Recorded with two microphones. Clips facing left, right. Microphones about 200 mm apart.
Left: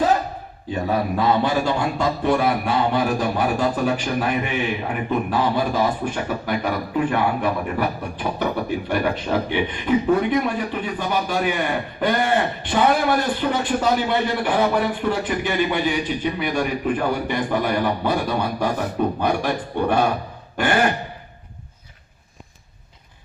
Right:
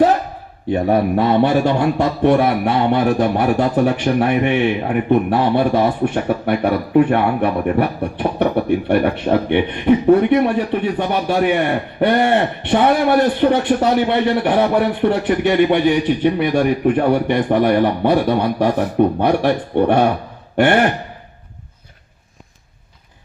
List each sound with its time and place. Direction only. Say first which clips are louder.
0.7 s a man's voice: right 7 dB; 60° right (ahead or behind)